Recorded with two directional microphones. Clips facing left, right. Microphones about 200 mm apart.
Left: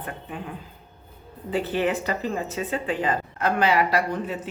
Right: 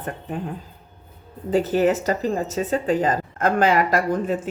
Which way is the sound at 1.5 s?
40° right (ahead or behind).